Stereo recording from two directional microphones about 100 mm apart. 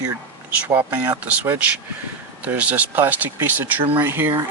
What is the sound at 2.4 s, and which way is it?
Speech, 15° right (ahead or behind).